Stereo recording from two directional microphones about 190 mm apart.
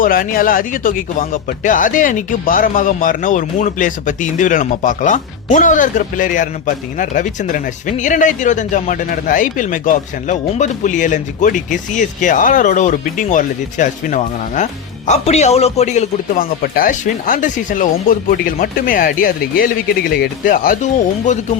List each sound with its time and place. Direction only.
0.0 s speech: 50° left (ahead or behind)